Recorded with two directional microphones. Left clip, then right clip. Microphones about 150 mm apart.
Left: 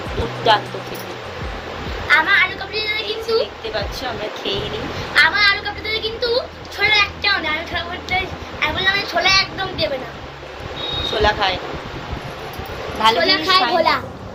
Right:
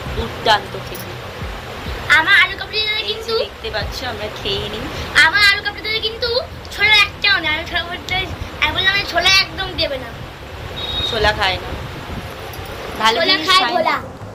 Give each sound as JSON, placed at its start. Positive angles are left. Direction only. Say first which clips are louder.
{"t": 0.5, "sound": "speech", "louder": "even", "side_deg": 0}
{"t": 2.0, "sound": "speech", "louder": "right 2 dB", "side_deg": 25}
{"t": 3.2, "sound": "speech", "louder": "left 1 dB", "side_deg": -5}
{"t": 5.1, "sound": "speech", "louder": "right 2 dB", "side_deg": 25}
{"t": 11.2, "sound": "speech", "louder": "even", "side_deg": 0}
{"t": 13.0, "sound": "speech", "louder": "even", "side_deg": 0}
{"t": 13.2, "sound": "speech", "louder": "right 1 dB", "side_deg": 30}